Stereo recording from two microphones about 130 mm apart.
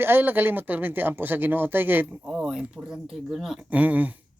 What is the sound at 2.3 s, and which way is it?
Speech, 5° right (ahead or behind).